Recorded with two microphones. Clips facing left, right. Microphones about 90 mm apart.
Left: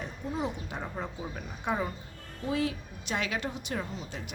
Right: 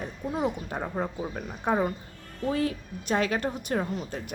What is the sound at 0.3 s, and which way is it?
A woman's voice, 50° right (ahead or behind).